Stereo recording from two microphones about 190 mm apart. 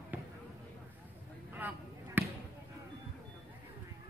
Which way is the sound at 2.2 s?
10° right (ahead or behind).